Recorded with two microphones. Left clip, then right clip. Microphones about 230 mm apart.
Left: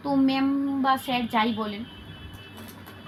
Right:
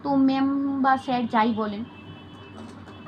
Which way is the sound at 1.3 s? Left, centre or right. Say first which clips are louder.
Right 3 dB; left.